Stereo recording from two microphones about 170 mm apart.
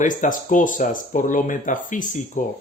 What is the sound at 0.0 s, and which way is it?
Speech, 50° left (ahead or behind).